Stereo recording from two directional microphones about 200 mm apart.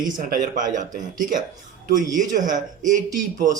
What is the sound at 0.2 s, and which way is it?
A man's voice, 45° right (ahead or behind).